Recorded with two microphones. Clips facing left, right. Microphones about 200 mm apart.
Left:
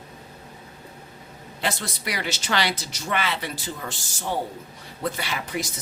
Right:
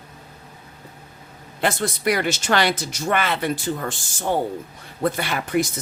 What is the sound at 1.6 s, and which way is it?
Speech, 50° right (ahead or behind).